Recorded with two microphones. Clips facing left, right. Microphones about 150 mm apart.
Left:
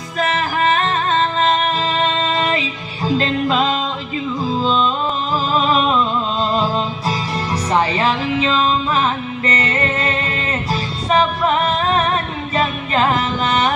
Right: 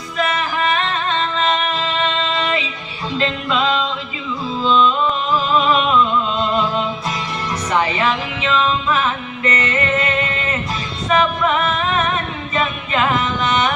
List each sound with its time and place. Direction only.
0.2 s music: 40° left (ahead or behind)